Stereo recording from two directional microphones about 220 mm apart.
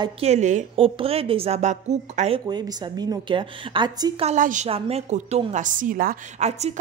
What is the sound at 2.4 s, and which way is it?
A woman's voice, 20° right (ahead or behind).